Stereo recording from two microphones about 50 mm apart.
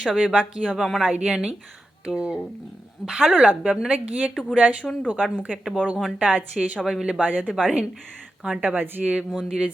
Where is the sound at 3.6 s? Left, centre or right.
Right.